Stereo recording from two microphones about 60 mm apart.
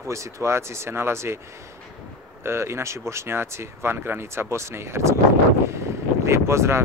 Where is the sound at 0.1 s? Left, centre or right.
Right.